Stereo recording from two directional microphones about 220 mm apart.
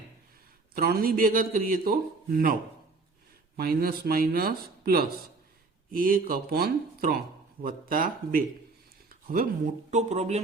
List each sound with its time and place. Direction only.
0.7 s a man's voice: 40° right (ahead or behind)
3.6 s a man's voice: 45° right (ahead or behind)